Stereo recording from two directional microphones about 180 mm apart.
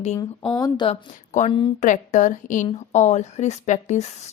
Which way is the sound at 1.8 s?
45° left (ahead or behind).